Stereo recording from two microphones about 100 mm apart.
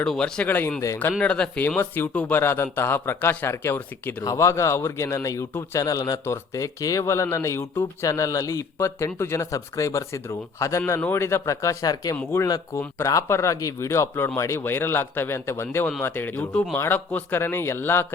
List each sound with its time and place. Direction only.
0.0 s a man's voice: 10° left (ahead or behind)
4.2 s a man's voice: 35° left (ahead or behind)
5.8 s a man's voice: 35° left (ahead or behind)